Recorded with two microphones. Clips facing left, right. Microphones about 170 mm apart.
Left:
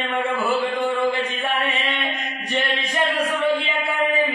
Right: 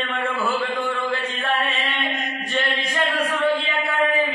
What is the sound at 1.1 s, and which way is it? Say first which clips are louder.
Chant: left 1 dB; 15° left (ahead or behind).